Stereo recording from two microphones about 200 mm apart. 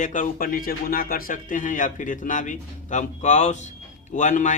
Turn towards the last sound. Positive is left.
turn(degrees=40)  # may be behind; listen again after turning